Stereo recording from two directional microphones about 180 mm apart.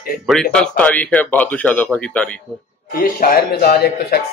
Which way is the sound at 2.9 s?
50° left (ahead or behind).